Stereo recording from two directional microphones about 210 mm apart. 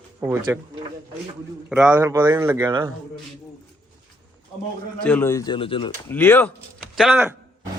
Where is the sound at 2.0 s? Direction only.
15° right (ahead or behind).